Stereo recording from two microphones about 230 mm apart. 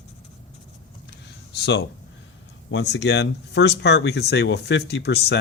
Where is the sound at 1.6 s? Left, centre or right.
Left.